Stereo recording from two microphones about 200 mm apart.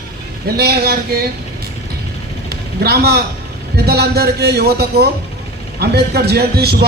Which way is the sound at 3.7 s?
50° right (ahead or behind).